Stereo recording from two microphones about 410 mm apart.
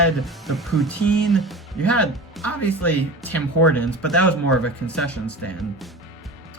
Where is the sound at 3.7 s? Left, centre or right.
Centre.